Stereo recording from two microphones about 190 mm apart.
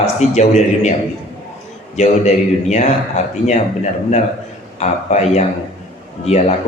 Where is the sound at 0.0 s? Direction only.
35° left (ahead or behind).